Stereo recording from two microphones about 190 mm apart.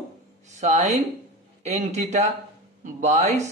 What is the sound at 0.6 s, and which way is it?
A woman's voice, 40° right (ahead or behind).